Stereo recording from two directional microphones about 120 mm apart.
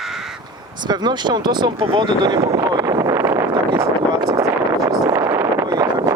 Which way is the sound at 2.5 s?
25° right (ahead or behind).